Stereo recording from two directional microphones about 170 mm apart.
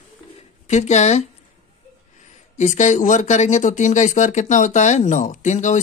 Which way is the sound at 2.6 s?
45° left (ahead or behind).